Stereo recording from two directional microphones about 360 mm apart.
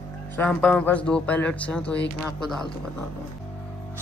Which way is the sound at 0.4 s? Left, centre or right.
Centre.